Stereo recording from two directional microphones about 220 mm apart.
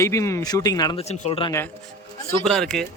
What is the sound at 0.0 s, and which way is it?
Speech, 15° left (ahead or behind).